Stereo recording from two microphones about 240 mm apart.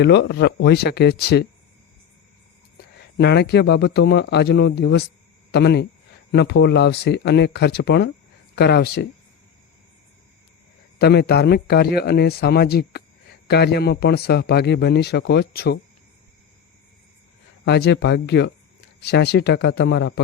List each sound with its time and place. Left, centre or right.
0.0 s a man's voice: left
3.2 s a man's voice: left
10.9 s a man's voice: left
17.7 s a man's voice: left